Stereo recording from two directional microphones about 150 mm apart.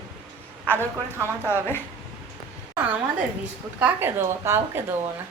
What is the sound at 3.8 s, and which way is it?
Speech, 15° right (ahead or behind).